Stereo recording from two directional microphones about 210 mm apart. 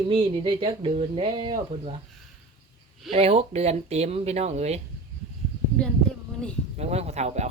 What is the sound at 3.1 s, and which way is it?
Speech, 30° right (ahead or behind).